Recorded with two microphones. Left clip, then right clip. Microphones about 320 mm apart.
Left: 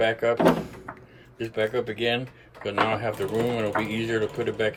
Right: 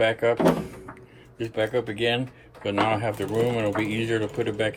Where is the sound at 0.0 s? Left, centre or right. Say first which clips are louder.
Right 1 dB; centre.